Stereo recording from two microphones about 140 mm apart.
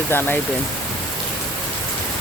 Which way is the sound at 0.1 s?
15° left (ahead or behind).